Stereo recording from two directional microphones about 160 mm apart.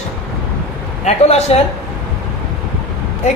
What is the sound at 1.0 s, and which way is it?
Speech, 45° left (ahead or behind).